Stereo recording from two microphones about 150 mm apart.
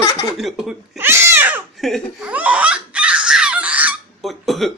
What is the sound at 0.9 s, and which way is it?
Cat, 15° right (ahead or behind).